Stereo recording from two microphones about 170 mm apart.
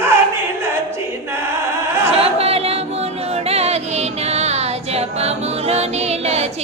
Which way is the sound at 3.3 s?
35° right (ahead or behind).